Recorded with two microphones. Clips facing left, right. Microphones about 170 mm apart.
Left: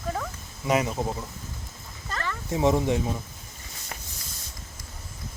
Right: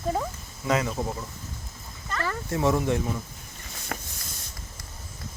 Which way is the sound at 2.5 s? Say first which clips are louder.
Left 2 dB; 20° left (ahead or behind).